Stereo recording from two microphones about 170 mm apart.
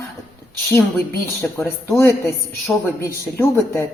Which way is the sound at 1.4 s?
15° left (ahead or behind).